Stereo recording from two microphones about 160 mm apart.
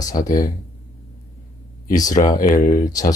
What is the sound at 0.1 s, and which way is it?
Speech, 40° left (ahead or behind).